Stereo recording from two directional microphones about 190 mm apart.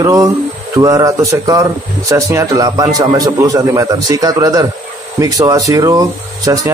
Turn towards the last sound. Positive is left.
turn(degrees=-20)  # may be behind; listen again after turning